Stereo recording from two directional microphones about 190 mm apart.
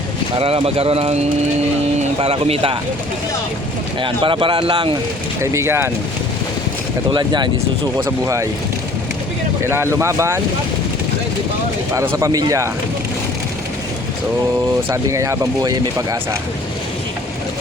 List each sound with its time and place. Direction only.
0.3 s speech: 30° right (ahead or behind)
4.0 s speech: 25° right (ahead or behind)
5.4 s speech: 15° right (ahead or behind)
7.1 s speech: 25° right (ahead or behind)
9.6 s speech: 15° right (ahead or behind)
11.9 s speech: 15° right (ahead or behind)
14.8 s speech: 15° right (ahead or behind)